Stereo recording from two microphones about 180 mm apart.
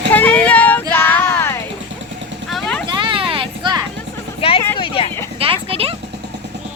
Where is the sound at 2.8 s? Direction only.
25° right (ahead or behind).